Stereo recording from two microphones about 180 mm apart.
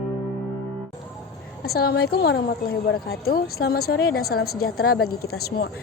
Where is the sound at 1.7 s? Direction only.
60° left (ahead or behind).